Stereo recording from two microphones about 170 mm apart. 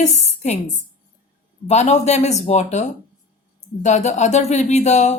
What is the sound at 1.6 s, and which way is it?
Speech, 40° left (ahead or behind).